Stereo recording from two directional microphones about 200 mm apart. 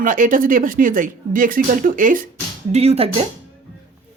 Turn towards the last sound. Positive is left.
turn(degrees=-30)  # may be behind; listen again after turning